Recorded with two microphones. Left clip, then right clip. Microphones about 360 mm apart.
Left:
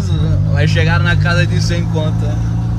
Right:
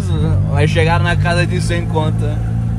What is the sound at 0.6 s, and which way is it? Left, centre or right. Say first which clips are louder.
Speech: right 2 dB; centre.